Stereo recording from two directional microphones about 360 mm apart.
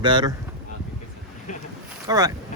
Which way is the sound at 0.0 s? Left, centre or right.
Centre.